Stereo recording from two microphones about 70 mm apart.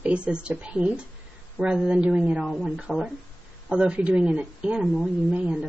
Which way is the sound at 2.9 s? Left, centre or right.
Centre.